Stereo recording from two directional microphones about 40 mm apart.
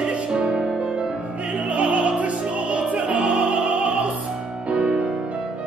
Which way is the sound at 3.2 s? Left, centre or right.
Right.